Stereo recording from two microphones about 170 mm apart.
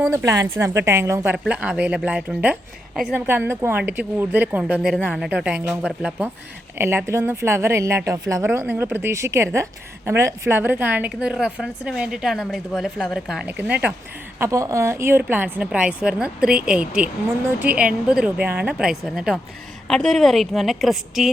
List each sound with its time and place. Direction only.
0.1 s a woman's voice: 15° right (ahead or behind); by 21.2 s centre (ahead or behind)